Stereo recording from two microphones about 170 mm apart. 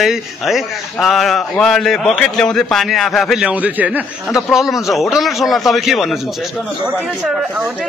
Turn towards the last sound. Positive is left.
turn(degrees=-5)  # may be behind; listen again after turning